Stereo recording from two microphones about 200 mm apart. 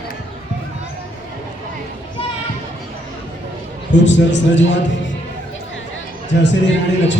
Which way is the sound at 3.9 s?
65° left (ahead or behind).